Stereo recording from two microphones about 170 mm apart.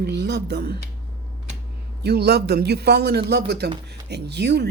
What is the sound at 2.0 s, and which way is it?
Speech, 75° right (ahead or behind).